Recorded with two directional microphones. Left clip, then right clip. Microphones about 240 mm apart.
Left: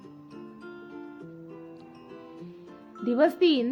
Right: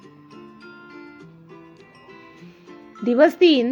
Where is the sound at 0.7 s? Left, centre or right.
Centre.